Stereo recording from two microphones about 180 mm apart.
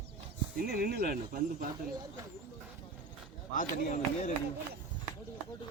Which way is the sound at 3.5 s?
45° left (ahead or behind).